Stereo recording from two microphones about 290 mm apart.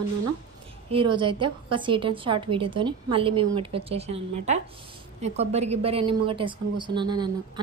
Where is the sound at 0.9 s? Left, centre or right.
Centre.